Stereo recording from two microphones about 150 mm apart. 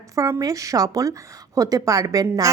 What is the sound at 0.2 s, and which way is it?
A woman's voice, 20° right (ahead or behind).